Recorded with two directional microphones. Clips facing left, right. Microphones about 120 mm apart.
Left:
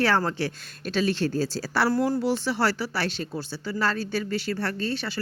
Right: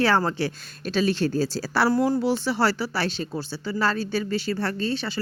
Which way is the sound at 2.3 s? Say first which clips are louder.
Right 2 dB; 35° right (ahead or behind).